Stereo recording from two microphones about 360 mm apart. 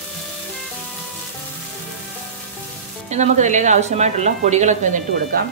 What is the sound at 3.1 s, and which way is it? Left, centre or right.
A woman's voice, centre.